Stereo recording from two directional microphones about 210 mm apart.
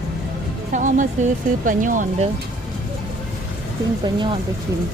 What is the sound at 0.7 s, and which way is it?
Speech, 35° right (ahead or behind).